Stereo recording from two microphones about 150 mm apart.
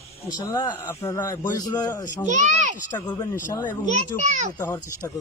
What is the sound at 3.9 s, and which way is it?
Speech, 55° right (ahead or behind).